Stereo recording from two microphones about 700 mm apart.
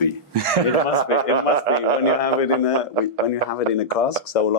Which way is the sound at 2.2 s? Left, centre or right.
Left.